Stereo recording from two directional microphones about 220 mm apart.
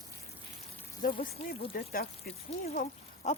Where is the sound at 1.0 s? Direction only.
40° left (ahead or behind).